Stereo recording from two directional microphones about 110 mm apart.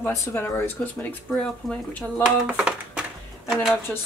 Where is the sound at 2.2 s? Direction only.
10° right (ahead or behind).